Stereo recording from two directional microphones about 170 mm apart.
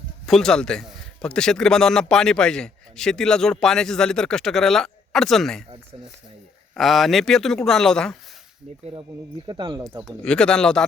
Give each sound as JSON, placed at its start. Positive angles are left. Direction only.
{"t": 0.3, "sound": "a man's voice", "side_deg": 5}
{"t": 6.7, "sound": "a man's voice", "side_deg": 0}
{"t": 9.5, "sound": "speech", "side_deg": -25}
{"t": 10.2, "sound": "a man's voice", "side_deg": 5}